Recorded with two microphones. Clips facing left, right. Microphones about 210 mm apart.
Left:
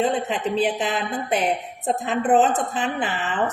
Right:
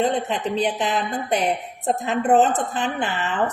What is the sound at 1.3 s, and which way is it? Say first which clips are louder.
Speech: even; 40° right (ahead or behind).